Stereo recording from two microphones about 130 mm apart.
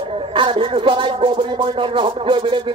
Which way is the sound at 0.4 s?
40° right (ahead or behind).